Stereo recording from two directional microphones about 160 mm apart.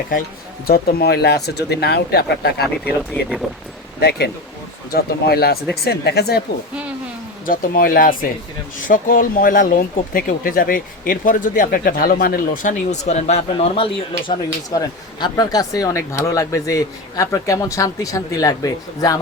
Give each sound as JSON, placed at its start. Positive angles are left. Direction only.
{"t": 0.7, "sound": "speech", "side_deg": 75}
{"t": 3.4, "sound": "speech", "side_deg": 0}
{"t": 4.9, "sound": "speech", "side_deg": 75}
{"t": 5.8, "sound": "speech", "side_deg": 90}
{"t": 7.4, "sound": "speech", "side_deg": 60}
{"t": 12.9, "sound": "speech", "side_deg": 45}
{"t": 14.3, "sound": "speech", "side_deg": 25}